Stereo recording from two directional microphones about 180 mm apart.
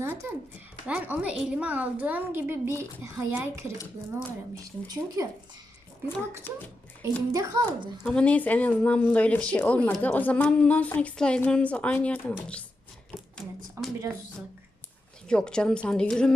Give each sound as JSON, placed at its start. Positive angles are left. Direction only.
{"t": 0.0, "sound": "a sound", "side_deg": -15}
{"t": 0.9, "sound": "a woman's voice", "side_deg": -10}
{"t": 6.1, "sound": "speech", "side_deg": 10}
{"t": 7.3, "sound": "speech", "side_deg": -20}
{"t": 8.0, "sound": "speech", "side_deg": 5}
{"t": 13.3, "sound": "a sound", "side_deg": 0}
{"t": 15.3, "sound": "a woman's voice", "side_deg": 5}